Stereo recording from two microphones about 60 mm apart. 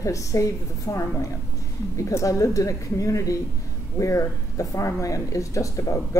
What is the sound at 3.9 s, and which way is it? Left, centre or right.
Speech, left.